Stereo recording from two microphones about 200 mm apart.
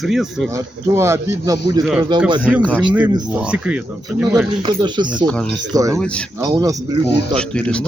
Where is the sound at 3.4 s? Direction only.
5° right (ahead or behind).